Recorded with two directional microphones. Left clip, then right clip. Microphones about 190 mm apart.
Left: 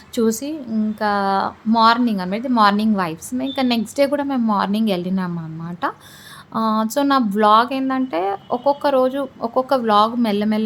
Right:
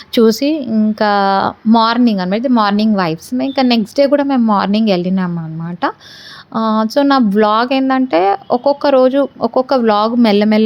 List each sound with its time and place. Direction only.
0.1 s a woman's voice: 35° right (ahead or behind)